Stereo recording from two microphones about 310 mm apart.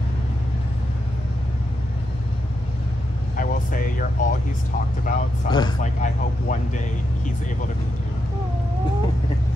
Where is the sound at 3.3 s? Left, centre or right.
Left.